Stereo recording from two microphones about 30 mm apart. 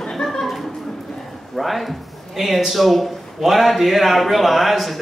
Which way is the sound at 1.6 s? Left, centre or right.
Centre.